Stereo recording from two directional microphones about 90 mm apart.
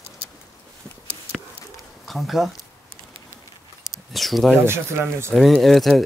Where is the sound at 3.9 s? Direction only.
Centre (ahead or behind).